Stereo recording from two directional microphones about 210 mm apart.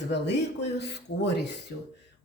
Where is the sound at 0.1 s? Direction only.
55° left (ahead or behind).